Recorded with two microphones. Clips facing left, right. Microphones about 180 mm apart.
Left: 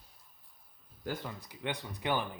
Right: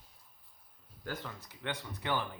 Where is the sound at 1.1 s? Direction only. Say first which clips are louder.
Left 3 dB; 15° left (ahead or behind).